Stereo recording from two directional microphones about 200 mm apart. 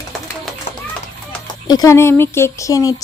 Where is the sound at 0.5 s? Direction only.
Centre (ahead or behind).